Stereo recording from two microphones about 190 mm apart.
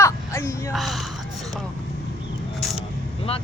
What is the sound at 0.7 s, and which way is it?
Speech, centre (ahead or behind).